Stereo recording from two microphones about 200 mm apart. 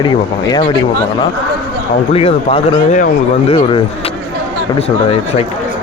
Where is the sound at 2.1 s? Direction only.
30° left (ahead or behind).